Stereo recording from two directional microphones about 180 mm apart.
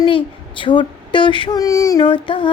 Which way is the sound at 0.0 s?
30° left (ahead or behind).